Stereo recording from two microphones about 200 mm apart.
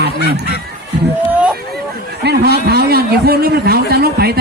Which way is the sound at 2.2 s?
50° right (ahead or behind).